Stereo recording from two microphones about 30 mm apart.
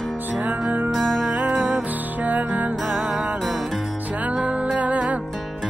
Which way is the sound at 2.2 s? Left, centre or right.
Right.